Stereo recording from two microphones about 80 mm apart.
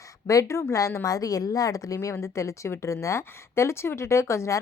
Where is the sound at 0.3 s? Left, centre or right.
Left.